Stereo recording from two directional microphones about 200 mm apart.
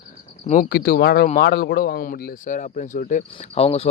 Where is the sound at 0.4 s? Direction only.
35° left (ahead or behind).